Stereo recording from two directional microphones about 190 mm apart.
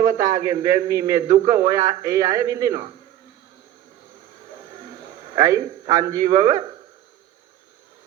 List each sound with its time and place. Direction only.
0.0 s a man's voice: 15° right (ahead or behind)
4.8 s a man's voice: 25° right (ahead or behind)